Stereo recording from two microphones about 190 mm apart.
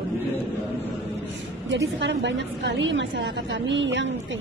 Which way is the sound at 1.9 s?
70° right (ahead or behind).